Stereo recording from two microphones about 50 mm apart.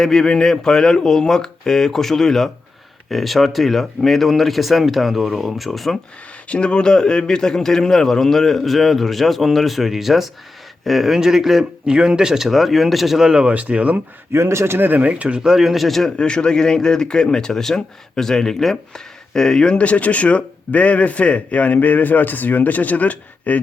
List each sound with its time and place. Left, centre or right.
0.0 s a man's voice: centre
6.5 s a man's voice: left; by 11.6 s centre
11.9 s speech: centre
13.5 s speech: right
14.3 s a man's voice: right
14.8 s speech: right
15.4 s speech: centre
16.1 s a man's voice: centre
19.7 s a man's voice: left